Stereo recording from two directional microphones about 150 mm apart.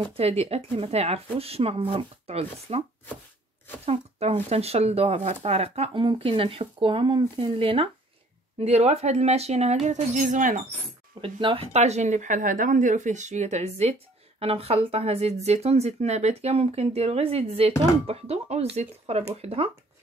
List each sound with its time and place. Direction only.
0.0 s speech: 40° right (ahead or behind)
3.8 s speech: 45° right (ahead or behind)
11.1 s speech: 35° right (ahead or behind)